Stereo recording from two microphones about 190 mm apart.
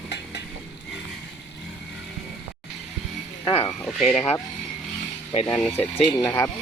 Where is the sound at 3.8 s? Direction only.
Centre (ahead or behind).